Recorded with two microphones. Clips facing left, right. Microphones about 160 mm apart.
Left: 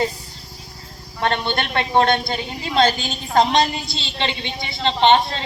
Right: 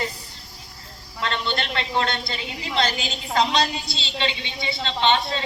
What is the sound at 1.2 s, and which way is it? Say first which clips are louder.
A woman's voice: left 5 dB; 60° left (ahead or behind).